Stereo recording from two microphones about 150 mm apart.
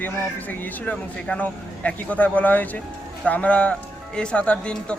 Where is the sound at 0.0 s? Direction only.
10° left (ahead or behind).